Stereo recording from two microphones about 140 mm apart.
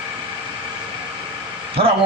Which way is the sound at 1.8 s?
40° right (ahead or behind).